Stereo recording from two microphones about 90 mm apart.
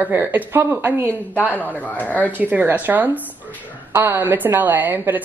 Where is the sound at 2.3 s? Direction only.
20° right (ahead or behind).